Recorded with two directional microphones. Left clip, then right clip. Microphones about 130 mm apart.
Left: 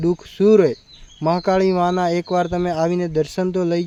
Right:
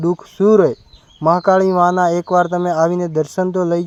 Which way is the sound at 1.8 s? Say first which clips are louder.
Right 5 dB; 20° left (ahead or behind).